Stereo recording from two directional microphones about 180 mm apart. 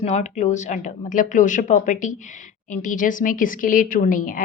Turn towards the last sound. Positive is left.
turn(degrees=50)  # may be behind; listen again after turning